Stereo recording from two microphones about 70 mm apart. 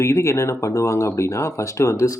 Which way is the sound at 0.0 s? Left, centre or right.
Left.